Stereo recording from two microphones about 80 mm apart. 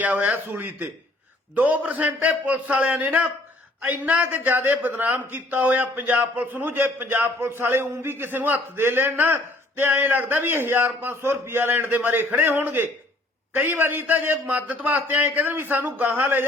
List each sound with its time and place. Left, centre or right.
0.0 s a man's voice: right